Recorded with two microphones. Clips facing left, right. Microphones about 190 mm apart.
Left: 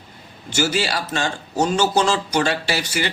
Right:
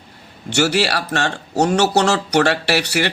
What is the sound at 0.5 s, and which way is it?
Speech, 70° right (ahead or behind).